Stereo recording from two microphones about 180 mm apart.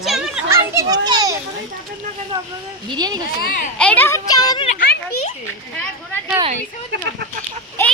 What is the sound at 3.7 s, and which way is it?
Speech, 5° left (ahead or behind).